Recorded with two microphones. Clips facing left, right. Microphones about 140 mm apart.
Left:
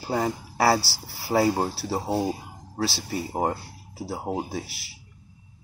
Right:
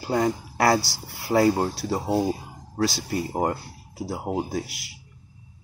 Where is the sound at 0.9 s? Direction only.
35° left (ahead or behind).